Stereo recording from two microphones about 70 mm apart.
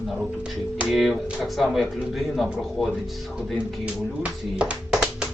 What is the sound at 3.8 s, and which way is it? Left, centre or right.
Speech, centre.